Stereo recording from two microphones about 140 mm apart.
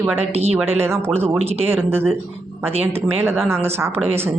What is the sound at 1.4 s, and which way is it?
Speech, 45° right (ahead or behind).